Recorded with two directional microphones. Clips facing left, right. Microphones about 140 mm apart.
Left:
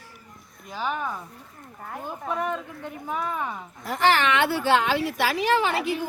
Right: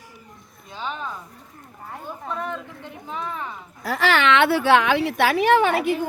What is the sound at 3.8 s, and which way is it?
A woman's voice, 90° right.